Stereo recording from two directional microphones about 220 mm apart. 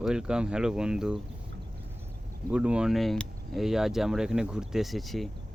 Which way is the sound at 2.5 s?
5° right (ahead or behind).